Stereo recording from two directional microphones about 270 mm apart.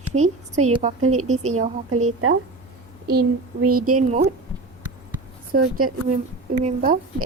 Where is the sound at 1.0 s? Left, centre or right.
Right.